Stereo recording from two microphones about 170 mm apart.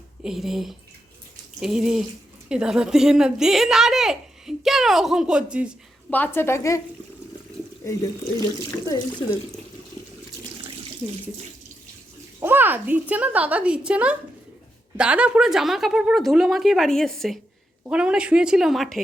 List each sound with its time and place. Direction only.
0.2 s a woman's voice: centre (ahead or behind)
6.1 s speech: 10° left (ahead or behind)
8.9 s speech: 25° left (ahead or behind)
12.4 s a woman's voice: 10° right (ahead or behind)